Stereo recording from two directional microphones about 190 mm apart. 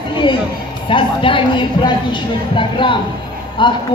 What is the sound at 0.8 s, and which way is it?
A woman's voice, 25° left (ahead or behind).